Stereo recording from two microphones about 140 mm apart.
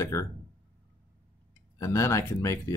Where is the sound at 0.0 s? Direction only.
20° left (ahead or behind).